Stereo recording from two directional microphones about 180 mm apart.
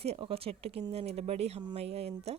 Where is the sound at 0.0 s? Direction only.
30° right (ahead or behind).